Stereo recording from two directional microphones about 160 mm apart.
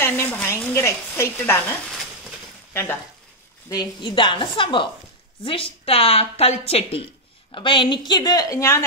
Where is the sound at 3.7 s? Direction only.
30° left (ahead or behind).